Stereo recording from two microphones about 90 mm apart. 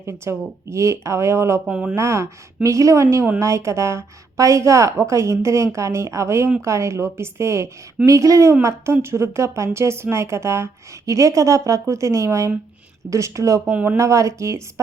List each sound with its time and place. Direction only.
0.0 s a woman's voice: 30° right (ahead or behind)
1.7 s speech: 10° right (ahead or behind)
2.0 s a woman's voice: 35° right (ahead or behind)